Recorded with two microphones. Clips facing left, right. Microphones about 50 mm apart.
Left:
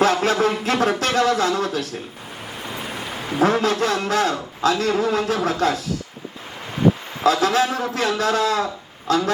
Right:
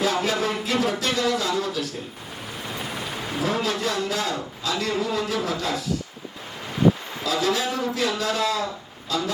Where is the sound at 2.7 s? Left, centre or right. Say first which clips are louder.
Left 1 dB; left.